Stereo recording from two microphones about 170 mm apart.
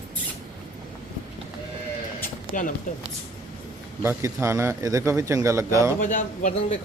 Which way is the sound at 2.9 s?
50° left (ahead or behind).